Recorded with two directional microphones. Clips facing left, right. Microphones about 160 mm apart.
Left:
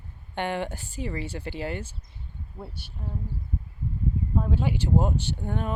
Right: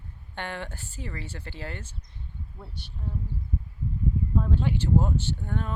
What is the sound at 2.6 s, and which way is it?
Speech, 25° left (ahead or behind).